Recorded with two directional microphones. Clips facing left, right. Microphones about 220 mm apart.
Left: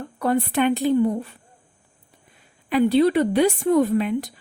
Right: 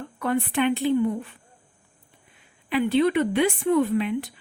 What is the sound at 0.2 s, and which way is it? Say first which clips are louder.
Speech: left 3 dB; 40° left (ahead or behind).